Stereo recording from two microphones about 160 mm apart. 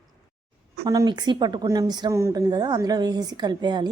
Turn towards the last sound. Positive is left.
turn(degrees=-25)  # may be behind; listen again after turning